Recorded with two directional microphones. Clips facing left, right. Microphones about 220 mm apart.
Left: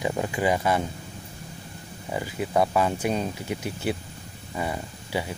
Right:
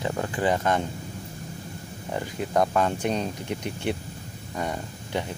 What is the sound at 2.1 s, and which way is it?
Speech, 5° left (ahead or behind).